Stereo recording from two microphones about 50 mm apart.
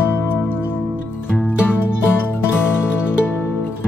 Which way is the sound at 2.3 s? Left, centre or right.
Left.